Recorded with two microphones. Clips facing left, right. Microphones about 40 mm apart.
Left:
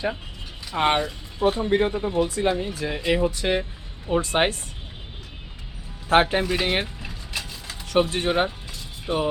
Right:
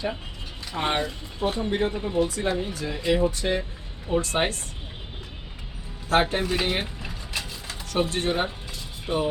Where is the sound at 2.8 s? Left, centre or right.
Left.